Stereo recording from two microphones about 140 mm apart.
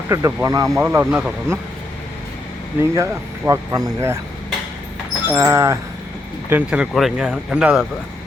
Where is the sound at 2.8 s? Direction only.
20° right (ahead or behind).